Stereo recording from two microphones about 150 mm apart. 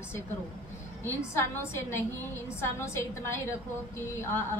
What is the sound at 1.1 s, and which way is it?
Speech, 15° left (ahead or behind).